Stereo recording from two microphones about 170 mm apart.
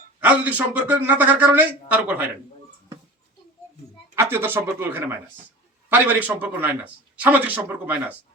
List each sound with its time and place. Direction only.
0.2 s a man's voice: 10° right (ahead or behind)
4.1 s a man's voice: 15° right (ahead or behind)